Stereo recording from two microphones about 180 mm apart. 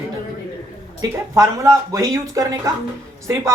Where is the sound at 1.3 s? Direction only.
15° right (ahead or behind).